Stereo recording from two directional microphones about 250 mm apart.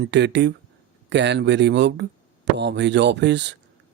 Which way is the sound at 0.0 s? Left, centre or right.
Right.